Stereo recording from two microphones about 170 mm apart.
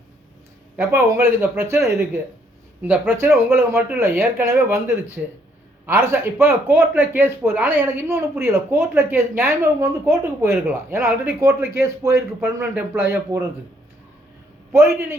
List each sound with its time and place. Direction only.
0.8 s speech: 15° right (ahead or behind)
14.7 s a man's voice: 15° right (ahead or behind)